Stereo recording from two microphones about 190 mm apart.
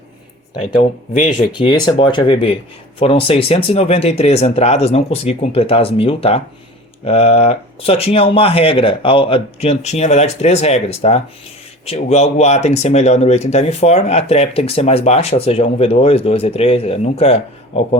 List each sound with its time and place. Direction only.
0.6 s speech: 40° left (ahead or behind)
1.5 s speech: 25° left (ahead or behind)